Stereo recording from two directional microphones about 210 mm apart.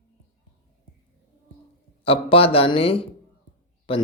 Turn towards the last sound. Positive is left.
turn(degrees=25)  # may be behind; listen again after turning